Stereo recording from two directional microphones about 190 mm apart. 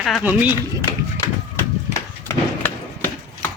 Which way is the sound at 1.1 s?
15° left (ahead or behind).